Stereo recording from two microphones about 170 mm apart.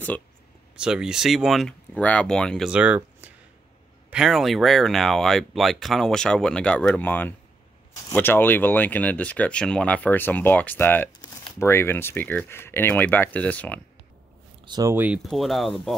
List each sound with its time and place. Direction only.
0.7 s speech: 5° right (ahead or behind)
2.7 s speech: 10° right (ahead or behind); by 13.7 s 10° left (ahead or behind)
14.6 s speech: 25° right (ahead or behind)
15.0 s speech: 5° right (ahead or behind)